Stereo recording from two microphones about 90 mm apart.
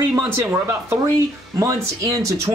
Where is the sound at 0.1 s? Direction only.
25° right (ahead or behind).